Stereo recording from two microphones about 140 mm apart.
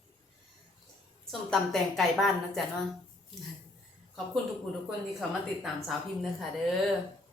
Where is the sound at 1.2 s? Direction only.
Centre (ahead or behind).